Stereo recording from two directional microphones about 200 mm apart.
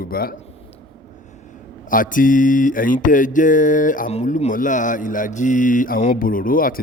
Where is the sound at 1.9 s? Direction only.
40° left (ahead or behind).